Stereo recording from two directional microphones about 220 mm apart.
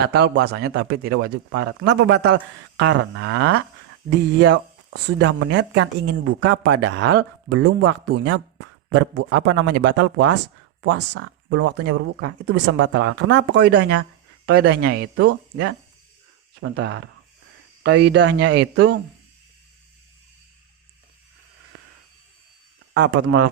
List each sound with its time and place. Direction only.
0.0 s speech: 50° right (ahead or behind)
7.5 s speech: 90° right
8.9 s speech: 55° right (ahead or behind)
10.3 s speech: 90° right; by 15.0 s 45° right (ahead or behind)
15.1 s speech: 60° right (ahead or behind)
16.7 s speech: 50° right (ahead or behind)